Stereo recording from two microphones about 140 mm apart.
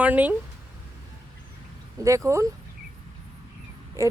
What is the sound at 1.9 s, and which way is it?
Speech, 20° right (ahead or behind).